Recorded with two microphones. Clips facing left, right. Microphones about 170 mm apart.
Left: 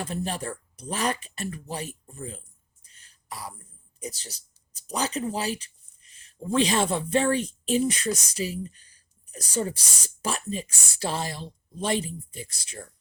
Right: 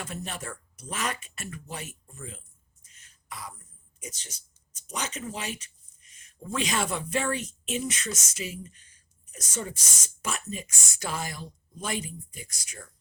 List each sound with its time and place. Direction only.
0.0 s a woman's voice: 35° left (ahead or behind)
2.8 s throat clearing: 35° left (ahead or behind)
4.0 s a woman's voice: 35° left (ahead or behind)